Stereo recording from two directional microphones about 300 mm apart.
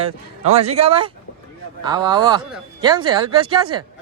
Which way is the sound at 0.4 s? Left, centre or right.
Right.